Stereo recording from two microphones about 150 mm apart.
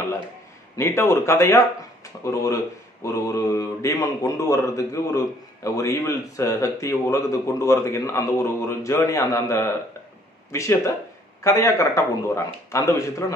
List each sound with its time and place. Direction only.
0.7 s speech: 20° left (ahead or behind)